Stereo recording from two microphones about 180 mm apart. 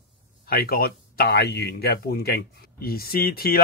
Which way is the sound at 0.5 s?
55° left (ahead or behind).